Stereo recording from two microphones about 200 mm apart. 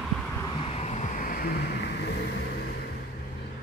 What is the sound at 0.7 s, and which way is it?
Vehicle, 35° left (ahead or behind).